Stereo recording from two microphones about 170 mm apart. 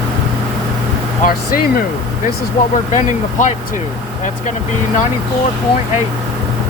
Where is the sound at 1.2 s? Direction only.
60° left (ahead or behind).